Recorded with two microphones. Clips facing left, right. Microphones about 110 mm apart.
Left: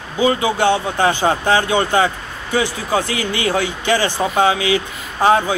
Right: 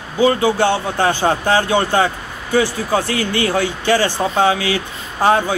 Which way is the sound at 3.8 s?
15° left (ahead or behind).